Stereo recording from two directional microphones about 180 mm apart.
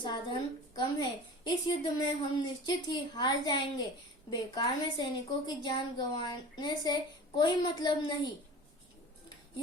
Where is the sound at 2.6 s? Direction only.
25° left (ahead or behind).